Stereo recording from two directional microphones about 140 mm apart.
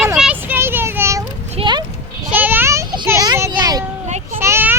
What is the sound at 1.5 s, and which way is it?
Clip-clop, 35° right (ahead or behind).